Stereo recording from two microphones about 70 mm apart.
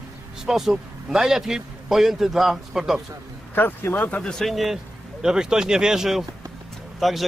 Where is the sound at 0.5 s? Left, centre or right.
Centre.